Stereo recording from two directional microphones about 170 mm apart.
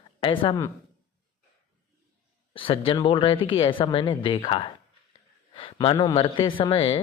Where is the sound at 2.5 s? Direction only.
30° left (ahead or behind).